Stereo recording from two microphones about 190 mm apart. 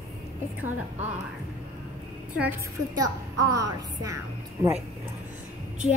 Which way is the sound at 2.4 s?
15° right (ahead or behind).